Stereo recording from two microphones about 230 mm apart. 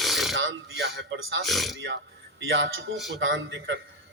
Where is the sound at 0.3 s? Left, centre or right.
Right.